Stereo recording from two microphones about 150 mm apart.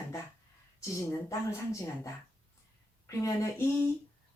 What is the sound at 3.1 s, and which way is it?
Speech, 20° left (ahead or behind).